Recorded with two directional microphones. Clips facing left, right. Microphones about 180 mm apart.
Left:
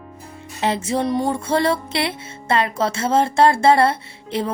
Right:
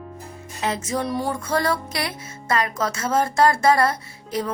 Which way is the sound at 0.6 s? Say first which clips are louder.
Left 4 dB; 30° left (ahead or behind).